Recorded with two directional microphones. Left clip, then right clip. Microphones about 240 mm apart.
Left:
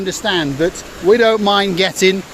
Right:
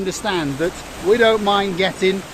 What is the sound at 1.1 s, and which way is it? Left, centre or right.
Speech, left.